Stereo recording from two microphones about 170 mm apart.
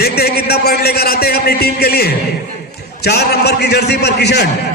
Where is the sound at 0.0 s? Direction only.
65° left (ahead or behind).